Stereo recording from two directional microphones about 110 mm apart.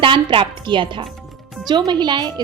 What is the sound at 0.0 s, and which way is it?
A woman's voice, 50° right (ahead or behind).